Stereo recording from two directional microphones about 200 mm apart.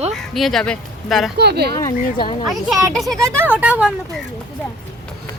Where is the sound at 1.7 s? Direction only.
15° left (ahead or behind).